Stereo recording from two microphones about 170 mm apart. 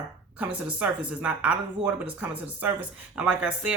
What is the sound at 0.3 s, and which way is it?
Speech, 10° right (ahead or behind).